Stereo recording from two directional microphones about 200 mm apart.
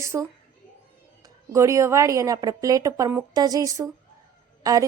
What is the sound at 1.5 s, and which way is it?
Speech, 15° right (ahead or behind).